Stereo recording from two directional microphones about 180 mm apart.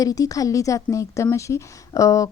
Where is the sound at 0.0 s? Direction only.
20° left (ahead or behind).